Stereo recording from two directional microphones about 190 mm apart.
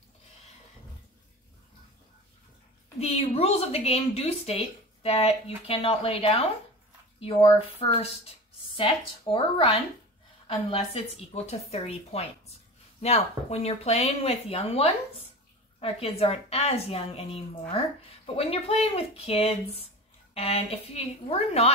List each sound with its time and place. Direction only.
3.0 s a woman's voice: 30° left (ahead or behind)
8.7 s a woman's voice: 25° left (ahead or behind)